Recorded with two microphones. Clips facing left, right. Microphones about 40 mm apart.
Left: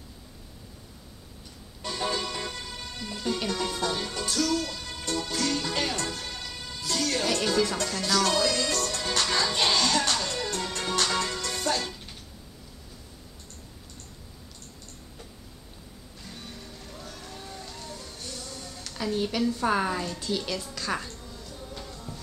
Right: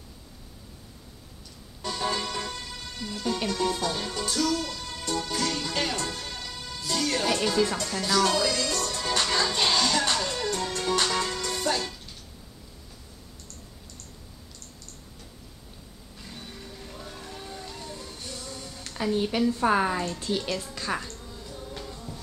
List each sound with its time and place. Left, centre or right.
2.1 s music: centre
7.9 s a woman's voice: centre
9.1 s music: centre
16.3 s music: centre
18.9 s a woman's voice: centre
20.9 s music: centre